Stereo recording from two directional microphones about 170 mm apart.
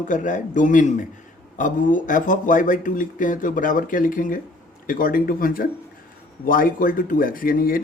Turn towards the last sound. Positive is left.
turn(degrees=55)  # may be behind; listen again after turning